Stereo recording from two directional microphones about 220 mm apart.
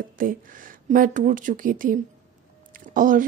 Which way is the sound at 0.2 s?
40° right (ahead or behind).